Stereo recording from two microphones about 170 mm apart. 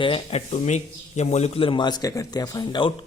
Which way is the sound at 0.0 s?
35° left (ahead or behind).